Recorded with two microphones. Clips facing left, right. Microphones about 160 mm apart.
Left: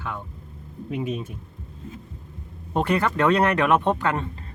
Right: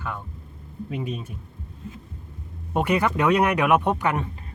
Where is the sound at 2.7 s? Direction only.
15° right (ahead or behind).